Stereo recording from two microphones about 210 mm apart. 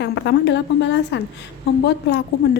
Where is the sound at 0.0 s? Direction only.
55° left (ahead or behind).